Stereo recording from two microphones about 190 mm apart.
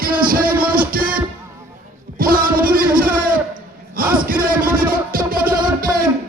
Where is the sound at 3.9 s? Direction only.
50° right (ahead or behind).